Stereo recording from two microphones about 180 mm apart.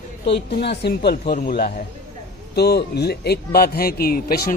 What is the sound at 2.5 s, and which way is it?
A man's voice, 65° left (ahead or behind).